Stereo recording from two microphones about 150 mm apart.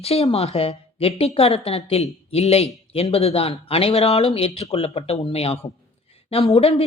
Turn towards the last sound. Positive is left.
turn(degrees=45)  # may be behind; listen again after turning